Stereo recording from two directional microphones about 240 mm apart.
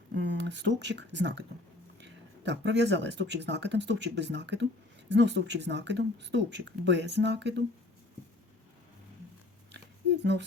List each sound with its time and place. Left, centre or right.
0.2 s speech: right